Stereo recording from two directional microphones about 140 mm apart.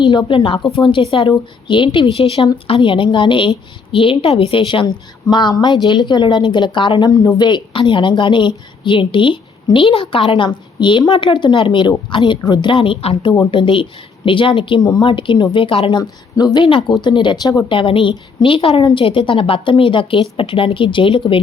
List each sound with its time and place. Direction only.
0.0 s speech: 35° left (ahead or behind)
15.9 s speech: 30° left (ahead or behind)
17.7 s speech: 40° left (ahead or behind)